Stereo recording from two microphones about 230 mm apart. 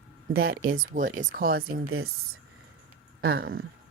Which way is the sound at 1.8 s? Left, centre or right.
Right.